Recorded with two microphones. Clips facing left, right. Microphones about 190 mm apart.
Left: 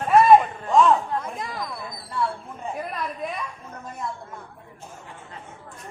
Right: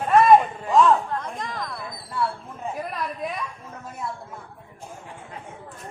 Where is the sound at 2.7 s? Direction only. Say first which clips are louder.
Even; centre (ahead or behind).